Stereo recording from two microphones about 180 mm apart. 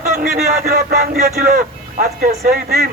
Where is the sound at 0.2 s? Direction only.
40° right (ahead or behind).